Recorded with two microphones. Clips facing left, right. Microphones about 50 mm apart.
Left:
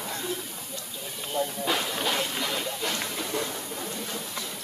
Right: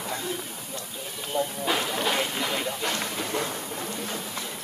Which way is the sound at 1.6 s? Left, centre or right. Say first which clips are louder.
Right 2 dB; centre.